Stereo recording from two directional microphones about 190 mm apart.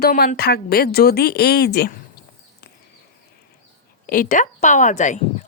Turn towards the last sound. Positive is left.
turn(degrees=40)  # may be behind; listen again after turning